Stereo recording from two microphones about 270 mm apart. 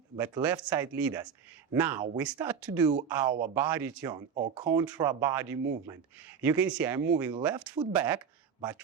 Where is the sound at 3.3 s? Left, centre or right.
Right.